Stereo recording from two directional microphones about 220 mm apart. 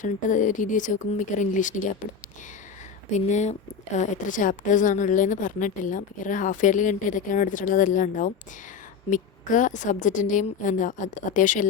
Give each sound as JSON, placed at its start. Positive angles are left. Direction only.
{"t": 0.0, "sound": "a woman's voice", "side_deg": 35}
{"t": 3.1, "sound": "a woman's voice", "side_deg": 30}